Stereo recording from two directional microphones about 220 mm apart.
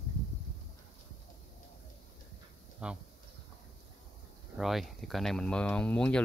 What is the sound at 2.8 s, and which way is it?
Speech, 5° right (ahead or behind).